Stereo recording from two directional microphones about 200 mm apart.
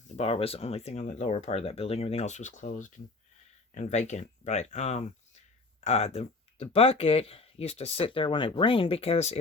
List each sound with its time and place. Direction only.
0.2 s speech: 30° left (ahead or behind)